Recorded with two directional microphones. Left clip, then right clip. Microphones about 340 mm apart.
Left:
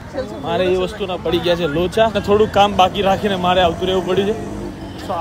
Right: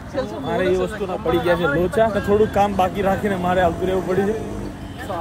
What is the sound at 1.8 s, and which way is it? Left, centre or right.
Speech, centre.